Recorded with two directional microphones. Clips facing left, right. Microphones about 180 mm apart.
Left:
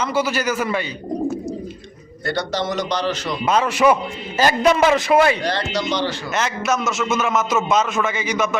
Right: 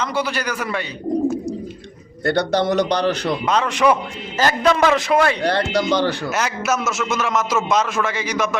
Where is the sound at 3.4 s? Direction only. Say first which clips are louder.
Left 2 dB; 5° left (ahead or behind).